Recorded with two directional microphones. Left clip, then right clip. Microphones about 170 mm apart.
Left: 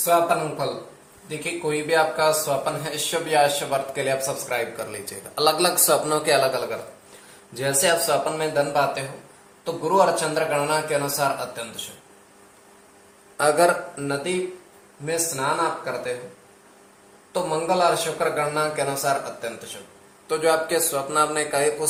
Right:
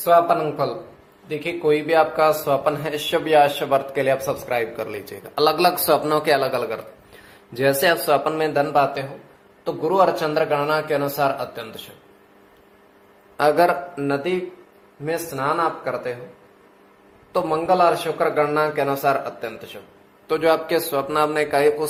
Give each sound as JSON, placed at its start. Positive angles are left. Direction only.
{"t": 0.0, "sound": "speech", "side_deg": -60}
{"t": 1.6, "sound": "speech", "side_deg": -60}
{"t": 13.3, "sound": "a man's voice", "side_deg": -45}
{"t": 15.0, "sound": "speech", "side_deg": -65}
{"t": 17.3, "sound": "a man's voice", "side_deg": -60}